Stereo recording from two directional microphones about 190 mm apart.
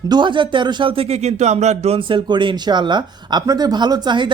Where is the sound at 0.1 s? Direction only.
25° right (ahead or behind).